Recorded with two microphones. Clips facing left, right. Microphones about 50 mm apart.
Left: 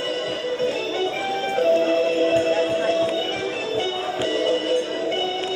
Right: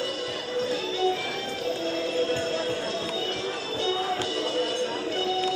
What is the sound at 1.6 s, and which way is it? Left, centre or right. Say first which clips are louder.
Music: left 12 dB; left.